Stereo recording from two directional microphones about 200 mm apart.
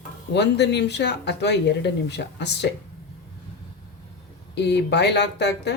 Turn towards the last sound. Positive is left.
turn(degrees=55)  # may be behind; listen again after turning